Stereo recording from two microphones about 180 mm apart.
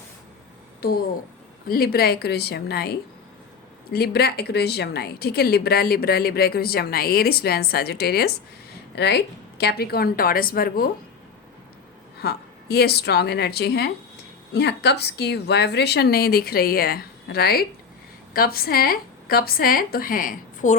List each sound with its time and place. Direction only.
0.8 s a woman's voice: 55° left (ahead or behind)
12.2 s speech: 60° left (ahead or behind)